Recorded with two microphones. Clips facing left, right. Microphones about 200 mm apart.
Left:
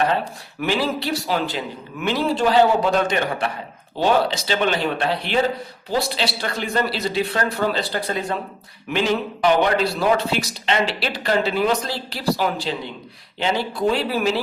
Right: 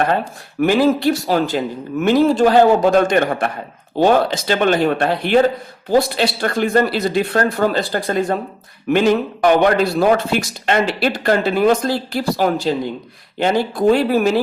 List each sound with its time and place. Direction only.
0.6 s speech: 50° right (ahead or behind)